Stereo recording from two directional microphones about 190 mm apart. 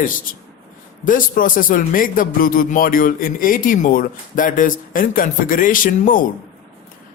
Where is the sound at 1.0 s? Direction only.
45° left (ahead or behind).